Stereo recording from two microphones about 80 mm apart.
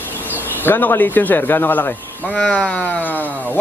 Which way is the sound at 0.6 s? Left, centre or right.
Left.